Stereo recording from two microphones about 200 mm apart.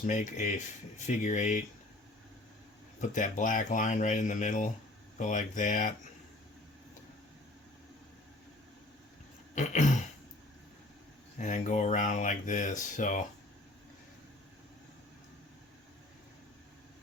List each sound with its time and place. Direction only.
0.0 s speech: 40° left (ahead or behind)
3.0 s speech: 40° left (ahead or behind)
9.6 s speech: 35° left (ahead or behind)
11.3 s speech: 40° left (ahead or behind)